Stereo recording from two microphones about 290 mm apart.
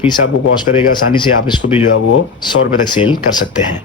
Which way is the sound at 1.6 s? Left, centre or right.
Left.